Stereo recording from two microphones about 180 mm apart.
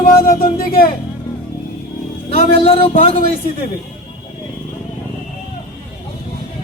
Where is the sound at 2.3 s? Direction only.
35° left (ahead or behind).